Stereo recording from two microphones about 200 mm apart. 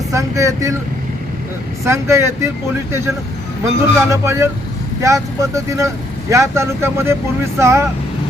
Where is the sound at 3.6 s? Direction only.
15° right (ahead or behind).